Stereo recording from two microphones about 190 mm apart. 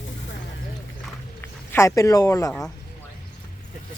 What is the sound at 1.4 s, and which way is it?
Speech, 15° left (ahead or behind).